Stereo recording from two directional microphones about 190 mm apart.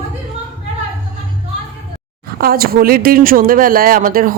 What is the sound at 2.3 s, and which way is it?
Speech, 50° right (ahead or behind).